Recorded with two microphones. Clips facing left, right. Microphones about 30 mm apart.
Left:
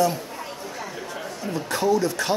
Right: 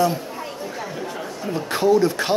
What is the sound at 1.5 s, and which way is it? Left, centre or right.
Speech, right.